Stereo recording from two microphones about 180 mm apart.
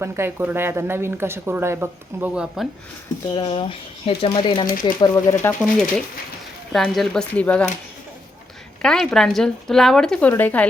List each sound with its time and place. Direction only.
0.0 s speech: 15° right (ahead or behind)
3.3 s speech: 30° left (ahead or behind)
6.7 s speech: centre (ahead or behind)
8.8 s speech: 5° left (ahead or behind)